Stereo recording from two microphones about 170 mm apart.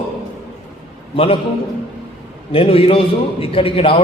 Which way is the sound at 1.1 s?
35° left (ahead or behind).